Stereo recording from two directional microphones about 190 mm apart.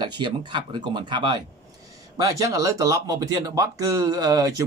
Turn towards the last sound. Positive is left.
turn(degrees=-20)  # may be behind; listen again after turning